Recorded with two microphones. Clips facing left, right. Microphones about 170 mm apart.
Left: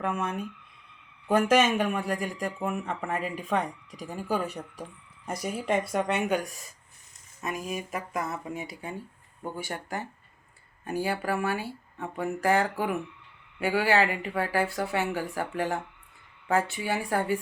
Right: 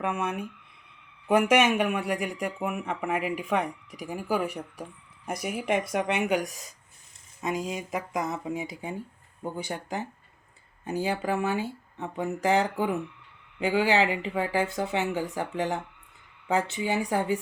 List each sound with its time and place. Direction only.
0.0 s speech: 10° right (ahead or behind)